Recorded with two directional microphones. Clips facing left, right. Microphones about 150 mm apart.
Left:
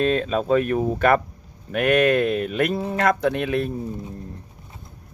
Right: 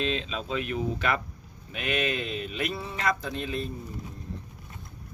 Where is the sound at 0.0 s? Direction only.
50° left (ahead or behind); by 3.7 s 65° left (ahead or behind).